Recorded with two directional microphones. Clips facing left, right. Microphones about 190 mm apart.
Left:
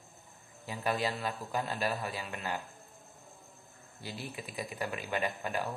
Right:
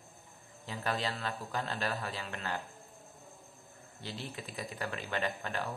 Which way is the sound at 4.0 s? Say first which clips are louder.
Left 1 dB; 10° left (ahead or behind).